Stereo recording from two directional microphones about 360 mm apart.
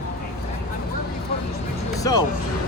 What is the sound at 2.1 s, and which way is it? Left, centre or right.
Speech, centre.